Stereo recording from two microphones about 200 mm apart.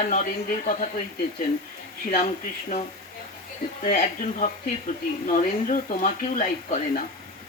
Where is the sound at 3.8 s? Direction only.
40° left (ahead or behind).